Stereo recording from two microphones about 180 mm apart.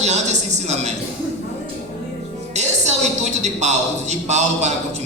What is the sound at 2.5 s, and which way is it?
Speech, 40° right (ahead or behind).